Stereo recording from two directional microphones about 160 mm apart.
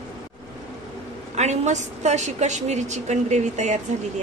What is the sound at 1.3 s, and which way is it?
A woman's voice, 45° right (ahead or behind).